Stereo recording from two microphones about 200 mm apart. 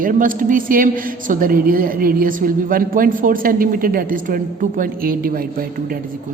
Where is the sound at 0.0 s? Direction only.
45° right (ahead or behind).